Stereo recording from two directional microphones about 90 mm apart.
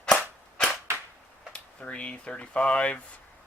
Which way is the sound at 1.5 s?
15° left (ahead or behind).